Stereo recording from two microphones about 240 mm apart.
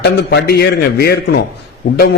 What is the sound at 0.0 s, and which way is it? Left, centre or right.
A man's voice, left.